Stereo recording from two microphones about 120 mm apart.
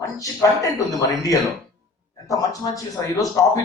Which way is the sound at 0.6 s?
30° left (ahead or behind).